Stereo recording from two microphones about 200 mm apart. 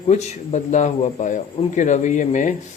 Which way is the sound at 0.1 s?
35° left (ahead or behind).